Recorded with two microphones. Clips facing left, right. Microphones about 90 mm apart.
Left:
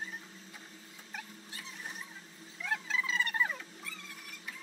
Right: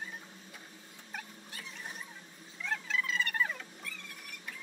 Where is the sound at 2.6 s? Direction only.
15° left (ahead or behind).